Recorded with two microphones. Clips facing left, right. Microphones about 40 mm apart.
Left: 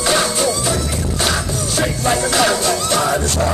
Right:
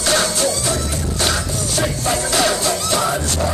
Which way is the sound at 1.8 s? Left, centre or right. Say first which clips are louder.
Left 3 dB; left.